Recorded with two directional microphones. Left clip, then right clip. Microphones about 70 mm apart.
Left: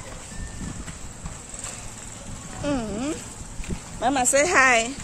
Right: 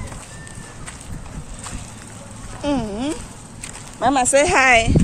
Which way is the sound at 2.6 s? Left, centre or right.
Centre.